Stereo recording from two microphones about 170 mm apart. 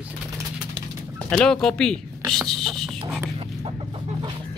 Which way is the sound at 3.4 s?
30° right (ahead or behind).